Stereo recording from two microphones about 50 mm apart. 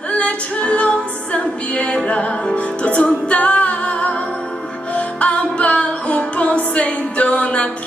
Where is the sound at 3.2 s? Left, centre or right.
Left.